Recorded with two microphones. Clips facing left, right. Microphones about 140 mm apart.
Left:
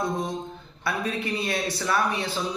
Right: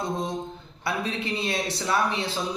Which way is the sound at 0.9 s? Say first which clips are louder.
Left 1 dB; 25° right (ahead or behind).